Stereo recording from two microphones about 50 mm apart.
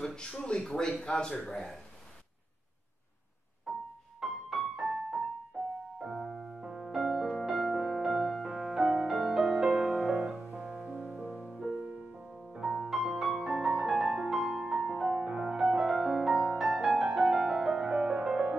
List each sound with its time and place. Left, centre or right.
0.0 s speech: centre
4.2 s music: centre
7.0 s music: centre